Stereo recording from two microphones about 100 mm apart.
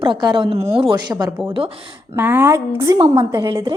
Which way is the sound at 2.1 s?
20° right (ahead or behind).